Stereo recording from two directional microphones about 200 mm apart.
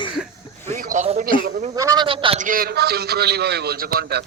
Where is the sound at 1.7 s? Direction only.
20° right (ahead or behind).